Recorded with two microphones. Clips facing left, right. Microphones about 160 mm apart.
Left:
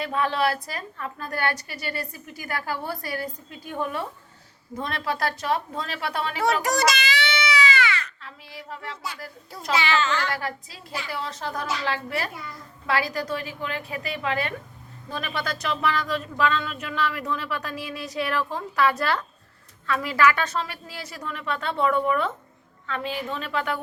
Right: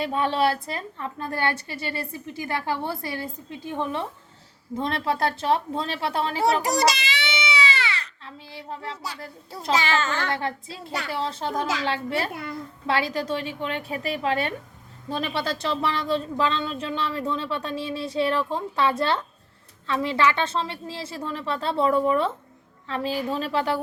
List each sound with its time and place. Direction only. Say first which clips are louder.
0.0 s a woman's voice: right 2 dB; 30° right (ahead or behind)
9.7 s a child's voice: left 1 dB; 45° right (ahead or behind)
10.2 s speech: right 2 dB; 25° right (ahead or behind)
12.3 s a child's voice: right 5 dB; 60° right (ahead or behind)
12.9 s a woman's voice: right 1 dB; 25° right (ahead or behind)